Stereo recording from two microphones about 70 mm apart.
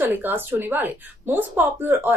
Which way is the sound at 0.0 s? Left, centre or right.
Right.